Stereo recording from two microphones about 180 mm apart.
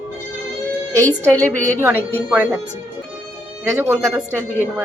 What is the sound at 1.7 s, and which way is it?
Speech, 10° right (ahead or behind).